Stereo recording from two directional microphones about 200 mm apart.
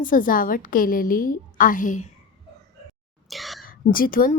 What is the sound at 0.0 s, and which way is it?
A woman's voice, 40° left (ahead or behind).